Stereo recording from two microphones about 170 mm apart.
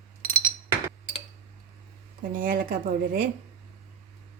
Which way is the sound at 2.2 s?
55° right (ahead or behind).